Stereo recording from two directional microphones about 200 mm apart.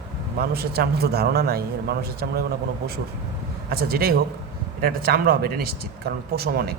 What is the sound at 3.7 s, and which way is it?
Speech, 50° right (ahead or behind).